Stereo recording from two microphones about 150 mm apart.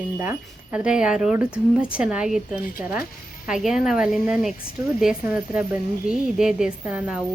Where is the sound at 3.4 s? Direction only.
5° right (ahead or behind).